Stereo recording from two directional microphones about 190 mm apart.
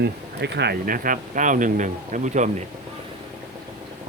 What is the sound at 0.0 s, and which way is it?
Speech, 60° right (ahead or behind).